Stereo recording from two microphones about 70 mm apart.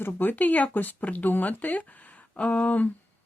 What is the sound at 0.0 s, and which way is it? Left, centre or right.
Speech, left.